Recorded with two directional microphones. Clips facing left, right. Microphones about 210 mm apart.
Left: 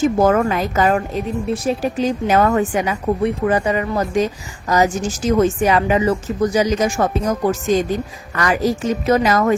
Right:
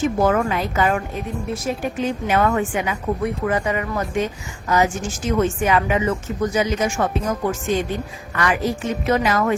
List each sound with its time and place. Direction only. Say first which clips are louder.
0.2 s a woman's voice: left 3 dB; 45° left (ahead or behind)